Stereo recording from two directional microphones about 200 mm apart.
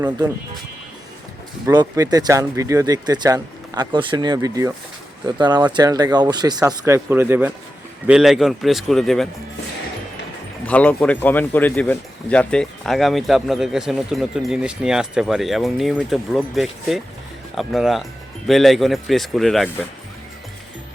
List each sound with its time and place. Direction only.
1.6 s speech: 20° right (ahead or behind); by 9.3 s centre (ahead or behind)
10.7 s speech: 5° left (ahead or behind)